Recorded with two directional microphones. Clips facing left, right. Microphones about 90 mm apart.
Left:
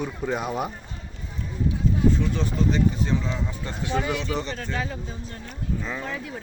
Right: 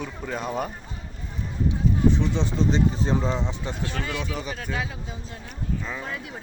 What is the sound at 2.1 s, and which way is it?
Speech, 20° right (ahead or behind).